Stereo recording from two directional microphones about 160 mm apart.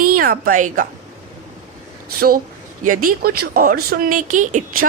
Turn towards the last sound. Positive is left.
turn(degrees=-50)  # may be behind; listen again after turning